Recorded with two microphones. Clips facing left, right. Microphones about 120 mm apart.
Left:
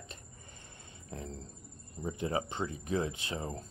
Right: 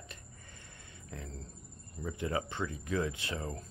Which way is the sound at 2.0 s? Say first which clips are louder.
Left 1 dB; 20° left (ahead or behind).